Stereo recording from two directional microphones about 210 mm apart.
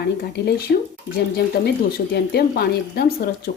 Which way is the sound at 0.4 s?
50° left (ahead or behind).